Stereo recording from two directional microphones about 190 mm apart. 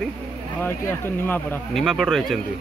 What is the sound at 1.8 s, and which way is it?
Speech, centre (ahead or behind).